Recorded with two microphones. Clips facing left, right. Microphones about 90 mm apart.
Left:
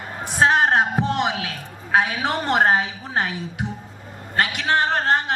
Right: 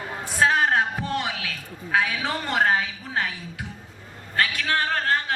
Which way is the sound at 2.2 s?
60° left (ahead or behind).